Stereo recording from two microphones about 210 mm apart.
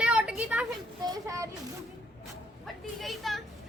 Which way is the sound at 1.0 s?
15° right (ahead or behind).